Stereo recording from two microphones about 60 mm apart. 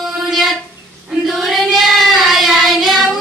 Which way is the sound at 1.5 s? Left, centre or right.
Centre.